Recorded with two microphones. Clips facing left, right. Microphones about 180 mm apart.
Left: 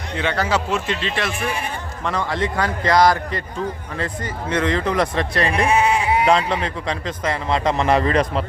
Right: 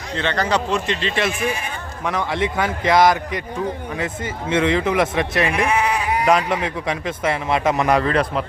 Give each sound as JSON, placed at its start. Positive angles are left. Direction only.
{"t": 0.2, "sound": "a man's voice", "side_deg": 5}
{"t": 2.1, "sound": "speech", "side_deg": -20}
{"t": 4.7, "sound": "speech", "side_deg": -10}
{"t": 5.5, "sound": "bleat", "side_deg": 30}
{"t": 6.2, "sound": "a man's voice", "side_deg": -10}